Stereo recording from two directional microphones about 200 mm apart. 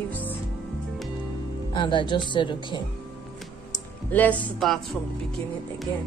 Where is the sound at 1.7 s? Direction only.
25° left (ahead or behind).